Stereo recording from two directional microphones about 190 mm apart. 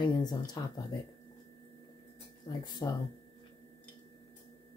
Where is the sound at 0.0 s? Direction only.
20° left (ahead or behind).